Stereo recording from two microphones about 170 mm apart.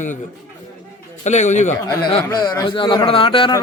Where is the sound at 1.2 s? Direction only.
45° left (ahead or behind).